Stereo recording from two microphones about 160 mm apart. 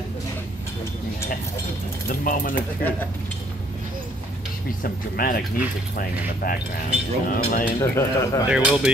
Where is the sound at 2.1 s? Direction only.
60° left (ahead or behind).